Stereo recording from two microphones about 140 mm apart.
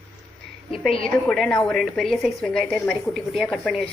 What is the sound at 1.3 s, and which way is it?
A woman's voice, 5° left (ahead or behind).